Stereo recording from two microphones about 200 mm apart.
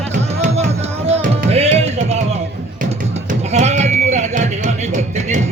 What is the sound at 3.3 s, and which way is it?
Music, 35° right (ahead or behind).